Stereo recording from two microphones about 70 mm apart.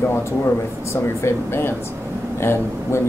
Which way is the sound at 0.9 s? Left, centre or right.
Left.